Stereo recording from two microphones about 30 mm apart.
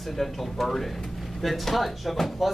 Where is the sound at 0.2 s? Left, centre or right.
Centre.